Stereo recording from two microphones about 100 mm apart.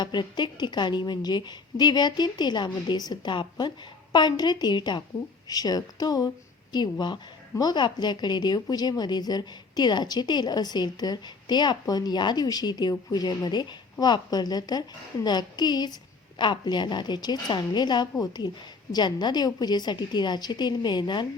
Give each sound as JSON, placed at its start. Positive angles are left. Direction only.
{"t": 0.0, "sound": "a woman's voice", "side_deg": 50}
{"t": 7.6, "sound": "a woman's voice", "side_deg": 45}